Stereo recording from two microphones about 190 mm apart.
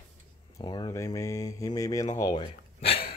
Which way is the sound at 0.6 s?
20° left (ahead or behind).